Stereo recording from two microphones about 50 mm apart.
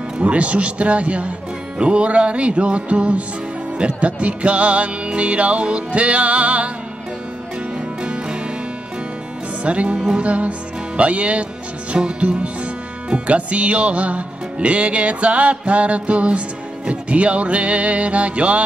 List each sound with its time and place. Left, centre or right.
0.2 s music: right
8.0 s music: centre
9.6 s music: right